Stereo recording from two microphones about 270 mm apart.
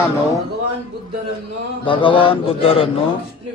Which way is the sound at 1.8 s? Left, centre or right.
Centre.